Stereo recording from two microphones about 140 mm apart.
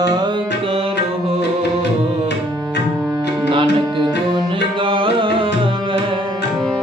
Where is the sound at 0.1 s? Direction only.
30° right (ahead or behind).